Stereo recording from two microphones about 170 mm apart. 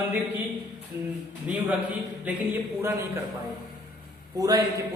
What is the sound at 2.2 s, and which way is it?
Speech, 10° right (ahead or behind).